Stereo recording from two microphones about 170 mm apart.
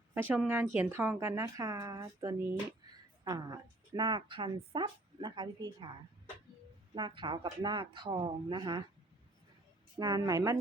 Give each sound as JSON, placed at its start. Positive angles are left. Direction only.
{"t": 0.1, "sound": "a woman's voice", "side_deg": -10}
{"t": 6.9, "sound": "a woman's voice", "side_deg": -25}
{"t": 10.0, "sound": "a woman's voice", "side_deg": -25}